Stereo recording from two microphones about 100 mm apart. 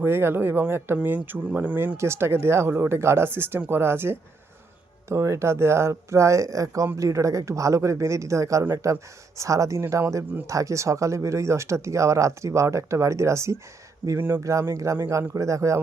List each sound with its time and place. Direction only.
0.0 s speech: 20° right (ahead or behind)
14.4 s speech: 30° right (ahead or behind)